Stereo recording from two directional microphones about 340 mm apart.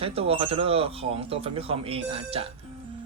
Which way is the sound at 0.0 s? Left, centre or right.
Centre.